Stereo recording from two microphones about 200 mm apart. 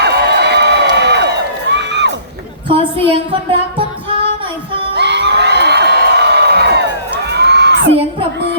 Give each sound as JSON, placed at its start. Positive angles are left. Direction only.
{"t": 0.0, "sound": "crowd", "side_deg": -55}
{"t": 1.7, "sound": "music", "side_deg": -60}
{"t": 2.6, "sound": "a sound", "side_deg": -25}
{"t": 4.9, "sound": "crowd", "side_deg": -60}